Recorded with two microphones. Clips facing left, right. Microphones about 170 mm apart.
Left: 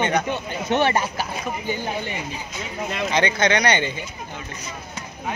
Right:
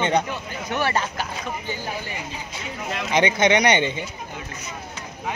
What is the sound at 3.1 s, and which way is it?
Speech, 20° right (ahead or behind).